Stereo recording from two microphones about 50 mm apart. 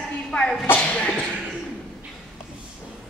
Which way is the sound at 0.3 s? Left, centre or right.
Centre.